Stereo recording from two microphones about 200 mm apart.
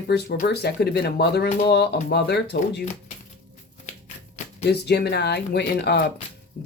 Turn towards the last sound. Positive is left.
turn(degrees=50)  # may be behind; listen again after turning